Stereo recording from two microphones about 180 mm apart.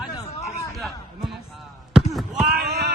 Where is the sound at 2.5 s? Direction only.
60° right (ahead or behind).